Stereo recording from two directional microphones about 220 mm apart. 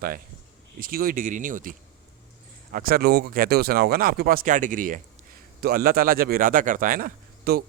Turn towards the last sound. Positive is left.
turn(degrees=-40)  # may be behind; listen again after turning